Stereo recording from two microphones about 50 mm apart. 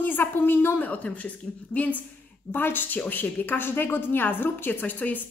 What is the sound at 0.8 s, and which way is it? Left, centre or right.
A woman's voice, left.